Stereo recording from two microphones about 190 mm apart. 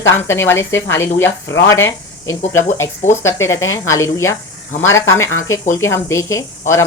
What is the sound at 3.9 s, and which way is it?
Speech, 15° left (ahead or behind).